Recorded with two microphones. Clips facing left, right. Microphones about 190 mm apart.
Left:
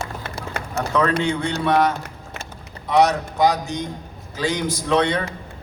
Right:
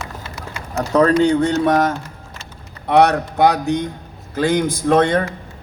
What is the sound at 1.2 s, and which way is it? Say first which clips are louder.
Speech: right 7 dB; 40° right (ahead or behind).